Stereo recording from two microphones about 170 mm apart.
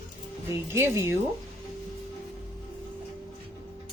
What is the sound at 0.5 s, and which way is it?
Speech, 15° right (ahead or behind).